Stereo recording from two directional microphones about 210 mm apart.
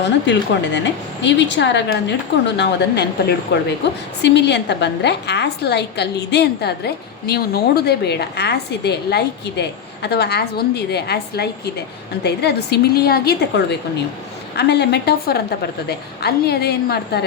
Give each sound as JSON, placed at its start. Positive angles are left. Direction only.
{"t": 0.0, "sound": "a woman's voice", "side_deg": 60}